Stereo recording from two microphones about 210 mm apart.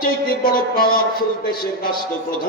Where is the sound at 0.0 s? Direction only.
45° left (ahead or behind).